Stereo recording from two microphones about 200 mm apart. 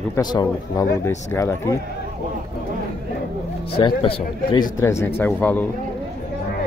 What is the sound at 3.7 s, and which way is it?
Speech, 25° left (ahead or behind).